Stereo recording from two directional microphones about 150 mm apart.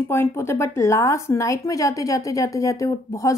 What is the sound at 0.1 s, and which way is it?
A woman's voice, 15° left (ahead or behind).